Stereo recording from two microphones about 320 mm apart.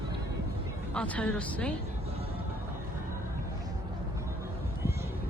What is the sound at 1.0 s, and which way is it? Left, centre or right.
Speech, centre.